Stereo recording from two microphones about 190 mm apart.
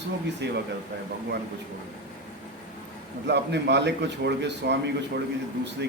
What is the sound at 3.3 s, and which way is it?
A man's voice, 65° right (ahead or behind).